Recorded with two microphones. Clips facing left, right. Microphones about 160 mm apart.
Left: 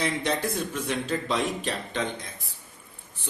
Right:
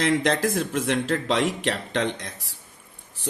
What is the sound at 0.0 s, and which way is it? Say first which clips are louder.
Speech: right 5 dB; 90° right.